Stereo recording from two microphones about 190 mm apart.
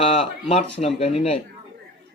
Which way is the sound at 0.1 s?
30° left (ahead or behind).